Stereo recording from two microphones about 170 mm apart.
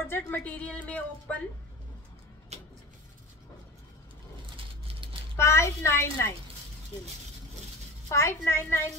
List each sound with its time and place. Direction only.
0.0 s a woman's voice: 10° left (ahead or behind)
2.5 s a sound: 40° right (ahead or behind)
5.3 s a woman's voice: 15° left (ahead or behind)
8.1 s a woman's voice: 15° left (ahead or behind)